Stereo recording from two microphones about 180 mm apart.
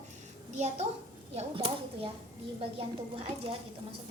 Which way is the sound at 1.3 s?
30° right (ahead or behind).